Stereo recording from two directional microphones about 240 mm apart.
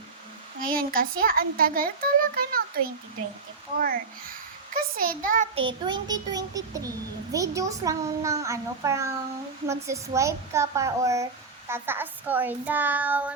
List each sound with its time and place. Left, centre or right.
0.6 s a child's voice: right
5.5 s a child's voice: centre